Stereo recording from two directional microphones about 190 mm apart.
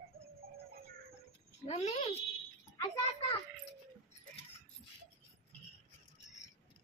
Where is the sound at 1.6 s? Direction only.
35° left (ahead or behind).